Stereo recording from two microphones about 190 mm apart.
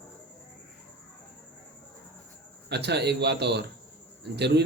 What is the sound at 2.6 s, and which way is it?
Speech, 60° right (ahead or behind).